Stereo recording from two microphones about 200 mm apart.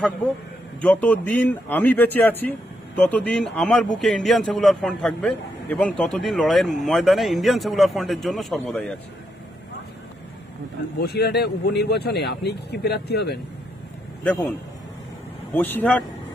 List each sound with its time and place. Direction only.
0.8 s a man's voice: 5° left (ahead or behind)
11.0 s speech: 55° left (ahead or behind)
15.5 s a man's voice: 10° left (ahead or behind)